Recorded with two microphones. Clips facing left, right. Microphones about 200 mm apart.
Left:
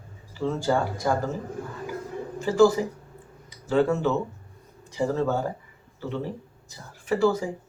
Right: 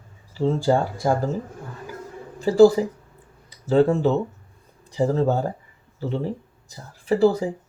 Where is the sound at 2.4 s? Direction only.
35° right (ahead or behind).